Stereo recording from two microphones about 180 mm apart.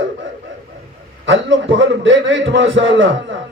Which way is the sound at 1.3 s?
90° right.